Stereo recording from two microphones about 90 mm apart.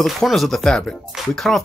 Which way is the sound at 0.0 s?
Centre (ahead or behind).